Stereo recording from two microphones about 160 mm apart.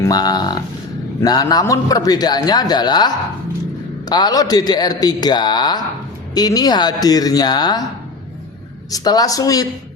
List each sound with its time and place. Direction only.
0.0 s a man's voice: 25° left (ahead or behind)
4.1 s a man's voice: 25° left (ahead or behind)
8.9 s a man's voice: 25° left (ahead or behind)